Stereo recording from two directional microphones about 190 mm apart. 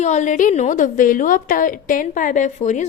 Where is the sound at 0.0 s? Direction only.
40° left (ahead or behind).